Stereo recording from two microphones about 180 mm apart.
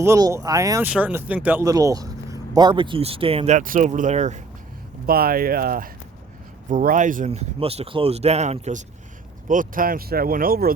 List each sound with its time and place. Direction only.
0.0 s speech: 15° right (ahead or behind)
0.9 s speech: 10° right (ahead or behind); by 4.4 s 40° right (ahead or behind)
5.0 s speech: 55° right (ahead or behind)